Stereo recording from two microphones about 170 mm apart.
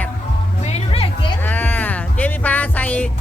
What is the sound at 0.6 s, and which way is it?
Music, 35° left (ahead or behind).